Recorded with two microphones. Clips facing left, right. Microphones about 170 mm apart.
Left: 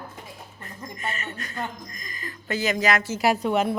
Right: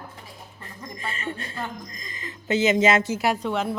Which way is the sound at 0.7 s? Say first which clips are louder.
Left 2 dB; 30° right (ahead or behind).